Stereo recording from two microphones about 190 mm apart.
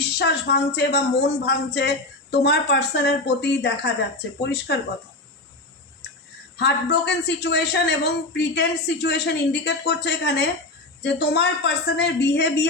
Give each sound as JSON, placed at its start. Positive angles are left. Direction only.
{"t": 0.0, "sound": "a man's voice", "side_deg": 60}
{"t": 6.6, "sound": "a man's voice", "side_deg": 60}